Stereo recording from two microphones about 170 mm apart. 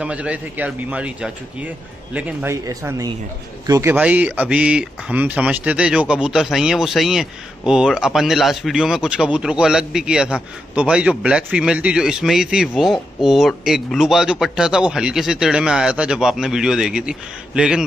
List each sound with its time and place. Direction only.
0.0 s speech: 5° right (ahead or behind)